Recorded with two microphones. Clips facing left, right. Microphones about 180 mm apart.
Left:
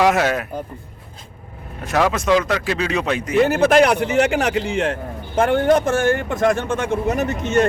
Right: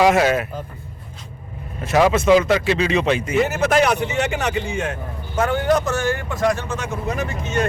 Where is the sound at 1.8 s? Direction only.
5° right (ahead or behind).